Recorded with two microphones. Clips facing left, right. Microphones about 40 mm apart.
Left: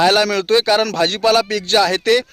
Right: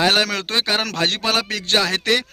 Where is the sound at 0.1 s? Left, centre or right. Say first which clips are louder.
Left 5 dB; right.